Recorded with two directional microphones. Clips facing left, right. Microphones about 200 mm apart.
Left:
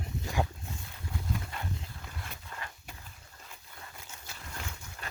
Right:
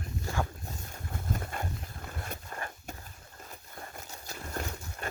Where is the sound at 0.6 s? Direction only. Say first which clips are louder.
Right 1 dB; 45° right (ahead or behind).